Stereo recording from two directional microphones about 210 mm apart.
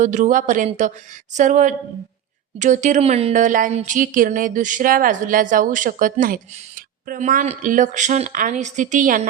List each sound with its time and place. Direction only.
0.0 s speech: 35° right (ahead or behind)